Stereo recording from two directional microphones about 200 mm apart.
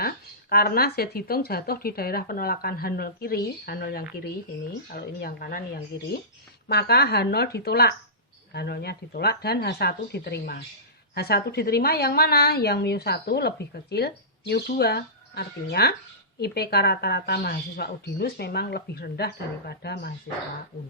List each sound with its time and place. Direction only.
0.5 s a woman's voice: 50° left (ahead or behind)